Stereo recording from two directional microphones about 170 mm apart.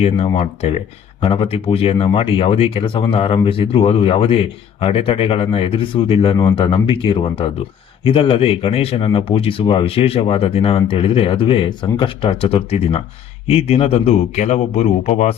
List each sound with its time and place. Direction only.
0.0 s speech: 35° left (ahead or behind)